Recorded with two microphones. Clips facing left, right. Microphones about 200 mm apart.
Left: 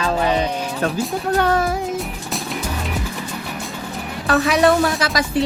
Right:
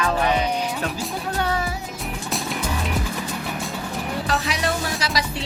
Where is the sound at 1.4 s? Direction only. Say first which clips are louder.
Left 7 dB; 50° left (ahead or behind).